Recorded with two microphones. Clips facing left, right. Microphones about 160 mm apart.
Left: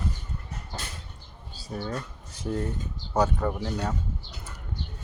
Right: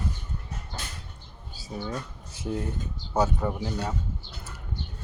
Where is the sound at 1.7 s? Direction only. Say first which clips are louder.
Left 1 dB; 15° right (ahead or behind).